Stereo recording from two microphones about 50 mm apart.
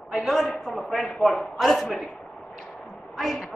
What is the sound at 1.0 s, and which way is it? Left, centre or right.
Speech, centre.